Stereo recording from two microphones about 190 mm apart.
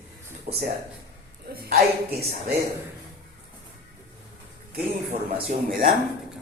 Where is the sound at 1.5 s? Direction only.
55° right (ahead or behind).